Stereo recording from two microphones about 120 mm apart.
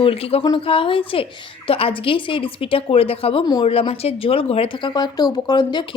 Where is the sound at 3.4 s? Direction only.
40° left (ahead or behind).